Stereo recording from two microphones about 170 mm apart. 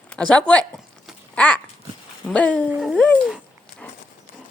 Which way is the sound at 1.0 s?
5° left (ahead or behind).